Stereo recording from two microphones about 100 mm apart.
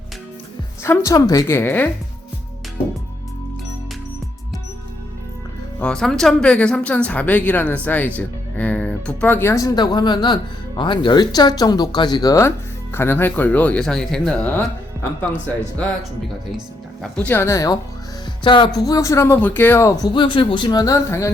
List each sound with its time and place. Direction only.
0.8 s a woman's voice: 30° left (ahead or behind)
5.8 s speech: 5° left (ahead or behind); by 12.4 s 40° left (ahead or behind)
12.4 s speech: 25° left (ahead or behind)
17.0 s speech: 15° left (ahead or behind)
17.5 s speech: 35° left (ahead or behind)
18.4 s music: 55° left (ahead or behind)
18.8 s a woman's voice: 35° left (ahead or behind); by 19.9 s 20° left (ahead or behind)
20.0 s speech: 50° left (ahead or behind)
20.7 s speech: 40° left (ahead or behind)